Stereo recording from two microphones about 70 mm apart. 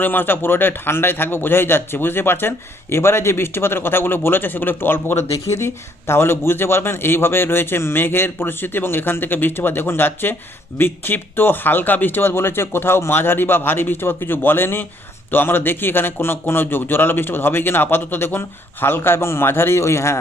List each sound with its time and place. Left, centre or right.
0.0 s speech: left
5.3 s speech: left